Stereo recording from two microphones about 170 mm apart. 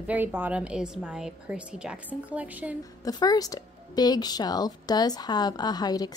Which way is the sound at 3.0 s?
20° left (ahead or behind).